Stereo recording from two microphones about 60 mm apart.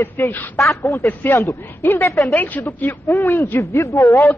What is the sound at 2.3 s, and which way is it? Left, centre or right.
A woman's voice, left.